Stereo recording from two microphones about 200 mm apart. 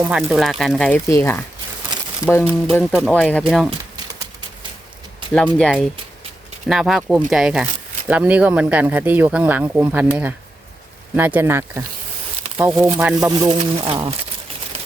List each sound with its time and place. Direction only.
0.0 s speech: 5° right (ahead or behind)
5.5 s speech: 5° left (ahead or behind)
13.3 s speech: 20° right (ahead or behind)
14.7 s typewriter: 30° right (ahead or behind)